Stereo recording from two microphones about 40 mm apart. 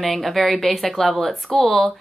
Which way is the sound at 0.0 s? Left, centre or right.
Centre.